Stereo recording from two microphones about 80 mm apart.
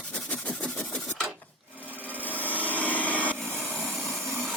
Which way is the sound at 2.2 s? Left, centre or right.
Left.